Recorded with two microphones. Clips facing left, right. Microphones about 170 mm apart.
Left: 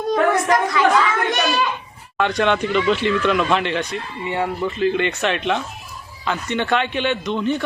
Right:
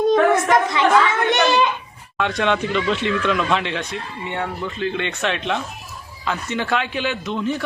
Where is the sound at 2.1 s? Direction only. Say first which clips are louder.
Left 2 dB; centre (ahead or behind).